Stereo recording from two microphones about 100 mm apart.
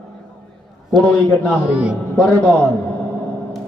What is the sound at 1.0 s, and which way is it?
Speech, 15° left (ahead or behind).